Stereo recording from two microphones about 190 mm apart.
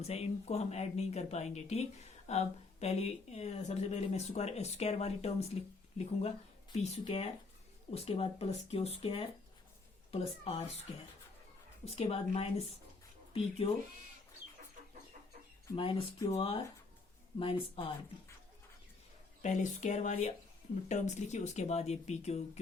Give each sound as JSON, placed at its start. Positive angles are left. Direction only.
{"t": 0.0, "sound": "speech", "side_deg": 35}
{"t": 6.8, "sound": "speech", "side_deg": 35}
{"t": 11.9, "sound": "speech", "side_deg": 30}
{"t": 15.7, "sound": "speech", "side_deg": 30}
{"t": 19.4, "sound": "speech", "side_deg": 40}